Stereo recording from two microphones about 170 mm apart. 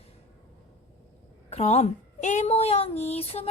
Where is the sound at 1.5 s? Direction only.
40° left (ahead or behind).